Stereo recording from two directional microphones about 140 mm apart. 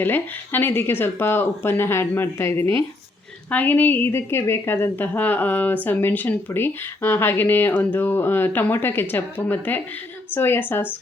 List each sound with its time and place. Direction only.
0.0 s a woman's voice: 15° left (ahead or behind)